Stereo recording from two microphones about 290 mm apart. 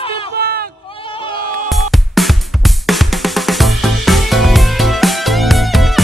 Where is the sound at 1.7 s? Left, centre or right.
Centre.